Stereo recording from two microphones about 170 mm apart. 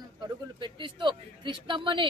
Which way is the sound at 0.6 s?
30° right (ahead or behind).